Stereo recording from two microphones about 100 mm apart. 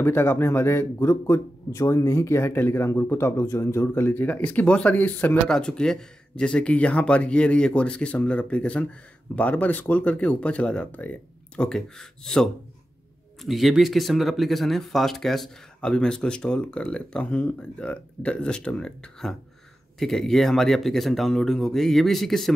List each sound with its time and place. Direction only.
0.0 s speech: 20° left (ahead or behind); by 22.5 s centre (ahead or behind)